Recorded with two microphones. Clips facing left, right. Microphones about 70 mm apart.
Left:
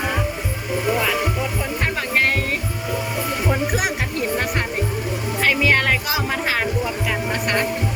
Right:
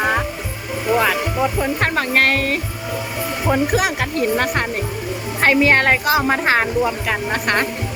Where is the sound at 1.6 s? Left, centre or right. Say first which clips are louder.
Right 5 dB; right.